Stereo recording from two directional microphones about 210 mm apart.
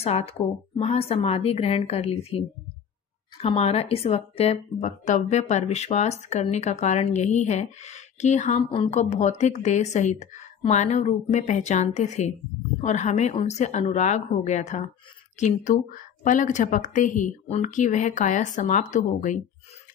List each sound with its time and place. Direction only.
0.0 s a woman's voice: 30° left (ahead or behind)
3.3 s a woman's voice: 30° left (ahead or behind)